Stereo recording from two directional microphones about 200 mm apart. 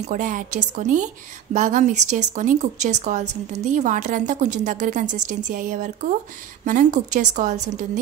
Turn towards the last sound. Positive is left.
turn(degrees=-35)  # may be behind; listen again after turning